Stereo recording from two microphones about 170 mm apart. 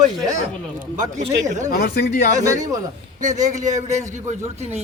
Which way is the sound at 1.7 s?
65° left (ahead or behind).